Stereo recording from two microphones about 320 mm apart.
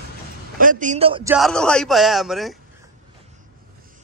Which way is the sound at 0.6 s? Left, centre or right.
Right.